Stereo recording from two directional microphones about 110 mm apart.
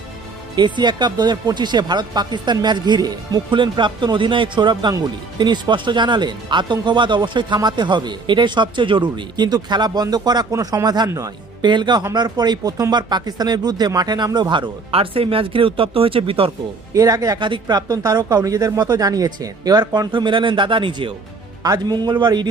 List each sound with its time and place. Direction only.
0.5 s speech: 45° right (ahead or behind)
16.9 s speech: 30° right (ahead or behind)
17.4 s speech: 45° right (ahead or behind)
20.1 s speech: 50° right (ahead or behind)
21.6 s speech: 35° right (ahead or behind)